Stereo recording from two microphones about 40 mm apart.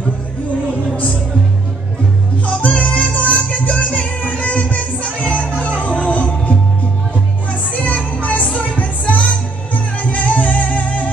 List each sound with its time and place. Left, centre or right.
2.4 s music: left
7.7 s music: left